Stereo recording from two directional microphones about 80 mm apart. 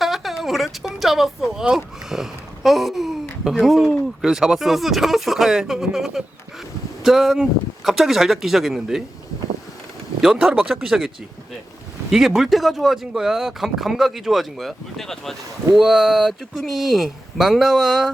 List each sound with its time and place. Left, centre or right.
0.0 s a sound: centre
1.6 s speech: centre
10.2 s speech: centre
12.1 s speech: centre